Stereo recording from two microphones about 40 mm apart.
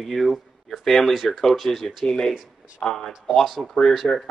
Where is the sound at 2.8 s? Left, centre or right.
Centre.